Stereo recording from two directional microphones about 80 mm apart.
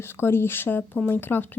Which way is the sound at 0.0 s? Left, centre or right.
Left.